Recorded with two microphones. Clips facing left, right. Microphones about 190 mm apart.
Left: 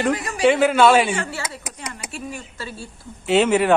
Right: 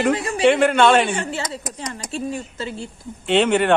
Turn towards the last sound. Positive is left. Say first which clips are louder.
# even
turn(degrees=5)  # may be behind; listen again after turning